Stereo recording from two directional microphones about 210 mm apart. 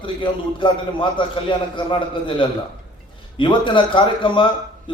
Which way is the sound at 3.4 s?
25° left (ahead or behind).